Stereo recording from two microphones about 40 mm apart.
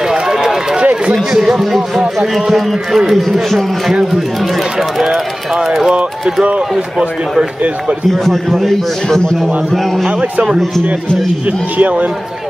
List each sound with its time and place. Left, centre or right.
0.1 s run: centre
1.4 s a man's voice: centre
3.3 s a man's voice: centre
3.9 s speech: centre
8.1 s a man's voice: centre
11.4 s speech: right